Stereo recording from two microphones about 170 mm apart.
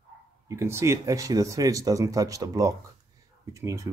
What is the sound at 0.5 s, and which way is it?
Speech, 15° right (ahead or behind).